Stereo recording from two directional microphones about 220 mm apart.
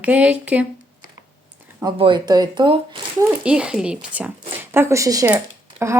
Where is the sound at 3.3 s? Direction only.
5° right (ahead or behind).